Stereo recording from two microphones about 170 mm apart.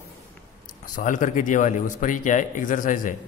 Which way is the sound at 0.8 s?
50° left (ahead or behind).